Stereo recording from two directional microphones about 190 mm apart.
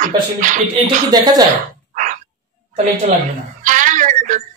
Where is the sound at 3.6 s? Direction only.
40° right (ahead or behind).